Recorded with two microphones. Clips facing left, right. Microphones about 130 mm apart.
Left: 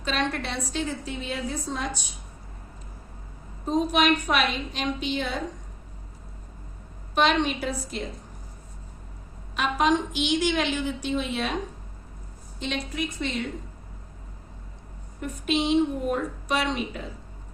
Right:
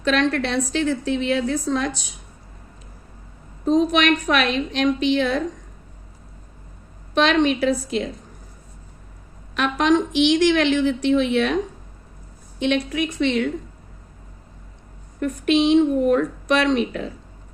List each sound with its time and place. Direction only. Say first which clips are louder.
0.0 s a woman's voice: right 8 dB; 85° right
3.7 s a woman's voice: right 5 dB; 90° right
7.1 s a woman's voice: right 5 dB; 90° right
9.6 s a woman's voice: right 5 dB; 85° right
12.5 s a woman's voice: right 9 dB; 70° right (ahead or behind)
15.2 s speech: right 8 dB; 80° right